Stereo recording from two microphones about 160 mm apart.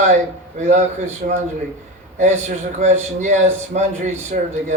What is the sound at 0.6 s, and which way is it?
A man's voice, 45° right (ahead or behind).